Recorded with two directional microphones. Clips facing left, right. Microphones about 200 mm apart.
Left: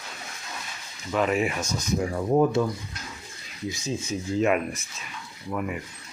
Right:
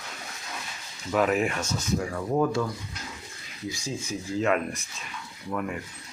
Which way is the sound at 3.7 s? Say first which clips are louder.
Left 4 dB; 20° left (ahead or behind).